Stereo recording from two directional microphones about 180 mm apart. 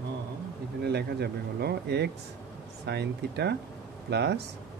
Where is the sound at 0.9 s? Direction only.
65° right (ahead or behind).